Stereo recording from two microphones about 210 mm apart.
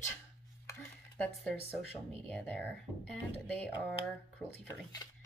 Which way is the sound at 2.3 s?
5° left (ahead or behind).